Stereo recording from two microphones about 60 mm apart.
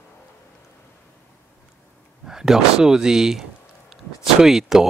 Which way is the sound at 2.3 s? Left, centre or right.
Centre.